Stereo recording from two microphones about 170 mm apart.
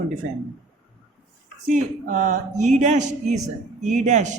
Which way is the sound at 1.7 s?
45° right (ahead or behind).